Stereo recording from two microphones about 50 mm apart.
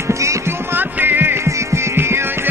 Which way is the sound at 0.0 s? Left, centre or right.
Right.